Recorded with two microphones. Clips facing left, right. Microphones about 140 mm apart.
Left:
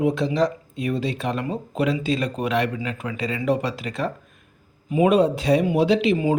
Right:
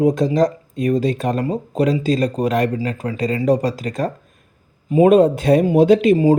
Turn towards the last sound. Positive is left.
turn(degrees=-40)  # may be behind; listen again after turning